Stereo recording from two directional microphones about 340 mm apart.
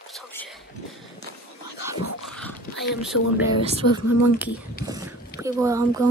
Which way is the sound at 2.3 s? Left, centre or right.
Centre.